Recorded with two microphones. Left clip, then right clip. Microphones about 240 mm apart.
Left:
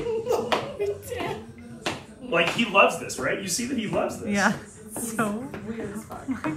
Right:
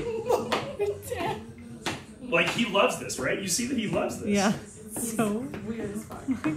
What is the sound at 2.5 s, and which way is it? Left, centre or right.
Speech, centre.